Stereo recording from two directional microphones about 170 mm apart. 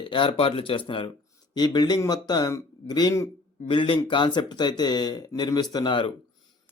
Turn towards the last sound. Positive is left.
turn(degrees=30)  # may be behind; listen again after turning